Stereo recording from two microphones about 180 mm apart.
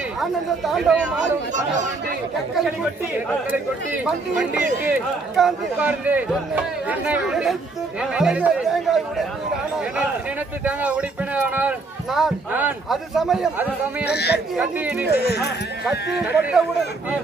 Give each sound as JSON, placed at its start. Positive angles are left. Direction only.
{"t": 0.2, "sound": "speech", "side_deg": 0}
{"t": 2.5, "sound": "speech", "side_deg": 0}
{"t": 3.9, "sound": "speech", "side_deg": -5}
{"t": 10.6, "sound": "speech", "side_deg": -10}
{"t": 14.1, "sound": "speech", "side_deg": 65}
{"t": 14.6, "sound": "speech", "side_deg": -10}
{"t": 15.1, "sound": "speech", "side_deg": 65}
{"t": 16.2, "sound": "speech", "side_deg": -5}